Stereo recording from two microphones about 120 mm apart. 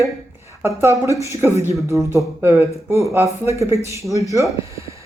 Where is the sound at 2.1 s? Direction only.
20° right (ahead or behind).